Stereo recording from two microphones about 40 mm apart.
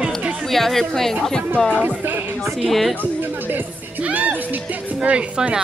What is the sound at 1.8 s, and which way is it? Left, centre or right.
Speech, right.